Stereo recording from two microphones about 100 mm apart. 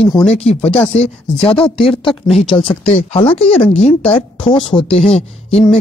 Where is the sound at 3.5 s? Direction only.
85° left.